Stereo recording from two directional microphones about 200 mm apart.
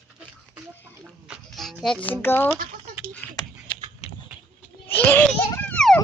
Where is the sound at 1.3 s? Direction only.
Centre (ahead or behind).